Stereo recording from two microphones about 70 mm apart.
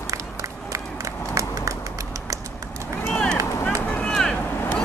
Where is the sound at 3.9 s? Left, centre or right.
Centre.